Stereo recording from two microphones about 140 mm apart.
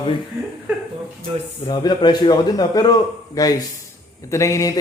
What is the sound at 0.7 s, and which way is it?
Speech, 10° right (ahead or behind).